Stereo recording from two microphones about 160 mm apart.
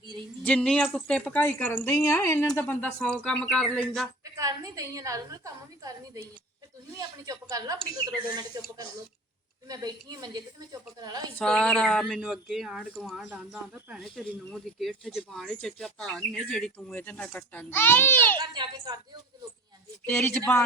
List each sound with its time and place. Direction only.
0.4 s a child's voice: 5° left (ahead or behind)
4.2 s a woman's voice: 20° right (ahead or behind)
9.6 s a woman's voice: 25° right (ahead or behind)
11.3 s speech: 5° left (ahead or behind); by 14.0 s 10° right (ahead or behind)
14.0 s a child's voice: centre (ahead or behind)
18.3 s a woman's voice: 25° right (ahead or behind)
20.1 s a child's voice: 10° left (ahead or behind)